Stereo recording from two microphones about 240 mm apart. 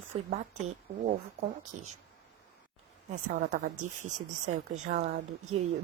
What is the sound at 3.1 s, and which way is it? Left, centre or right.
A woman's voice, right.